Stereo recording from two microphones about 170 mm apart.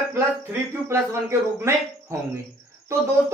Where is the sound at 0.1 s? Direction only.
15° right (ahead or behind).